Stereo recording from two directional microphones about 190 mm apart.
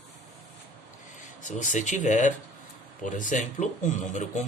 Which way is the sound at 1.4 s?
40° left (ahead or behind).